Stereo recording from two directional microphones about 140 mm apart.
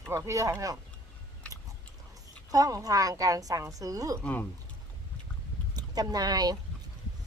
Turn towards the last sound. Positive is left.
turn(degrees=-30)  # may be behind; listen again after turning